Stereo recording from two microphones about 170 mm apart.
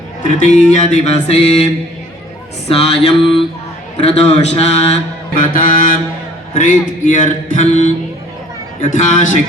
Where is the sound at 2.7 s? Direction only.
35° left (ahead or behind).